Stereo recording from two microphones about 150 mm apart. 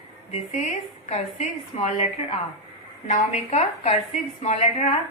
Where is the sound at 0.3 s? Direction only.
50° left (ahead or behind).